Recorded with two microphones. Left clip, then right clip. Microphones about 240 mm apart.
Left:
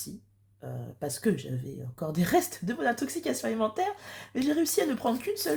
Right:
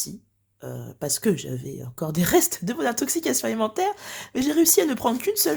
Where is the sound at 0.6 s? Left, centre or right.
Right.